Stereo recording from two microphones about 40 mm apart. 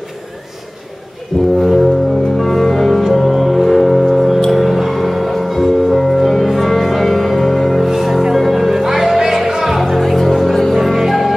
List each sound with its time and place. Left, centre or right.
1.6 s music: centre
10.7 s music: centre